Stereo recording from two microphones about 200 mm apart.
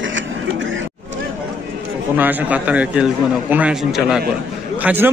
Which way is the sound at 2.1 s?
10° right (ahead or behind).